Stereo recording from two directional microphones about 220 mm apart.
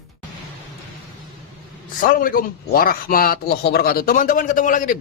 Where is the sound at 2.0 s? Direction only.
40° left (ahead or behind).